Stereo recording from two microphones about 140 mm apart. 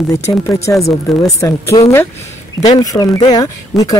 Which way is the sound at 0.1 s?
20° left (ahead or behind).